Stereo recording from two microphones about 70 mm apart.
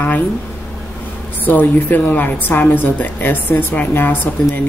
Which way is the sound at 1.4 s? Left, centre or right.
Left.